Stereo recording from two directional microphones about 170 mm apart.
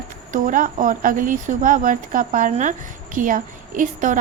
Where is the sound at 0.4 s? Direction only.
50° right (ahead or behind).